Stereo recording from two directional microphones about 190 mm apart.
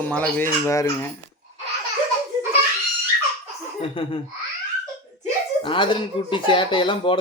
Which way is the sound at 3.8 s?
30° left (ahead or behind).